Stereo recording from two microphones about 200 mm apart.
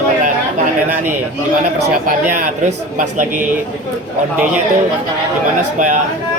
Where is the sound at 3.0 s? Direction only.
40° right (ahead or behind).